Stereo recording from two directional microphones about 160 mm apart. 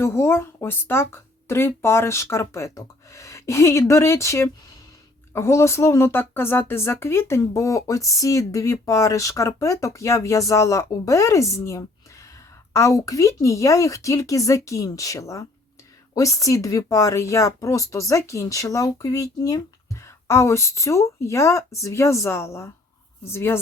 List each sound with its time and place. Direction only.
0.0 s speech: 15° left (ahead or behind)